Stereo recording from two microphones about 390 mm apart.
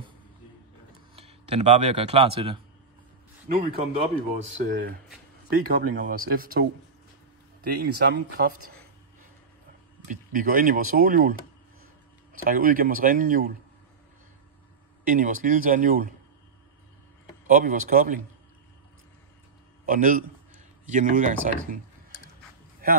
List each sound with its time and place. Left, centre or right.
1.1 s speech: centre
10.0 s speech: right
12.4 s speech: right
15.0 s speech: centre
17.5 s speech: right
19.9 s speech: right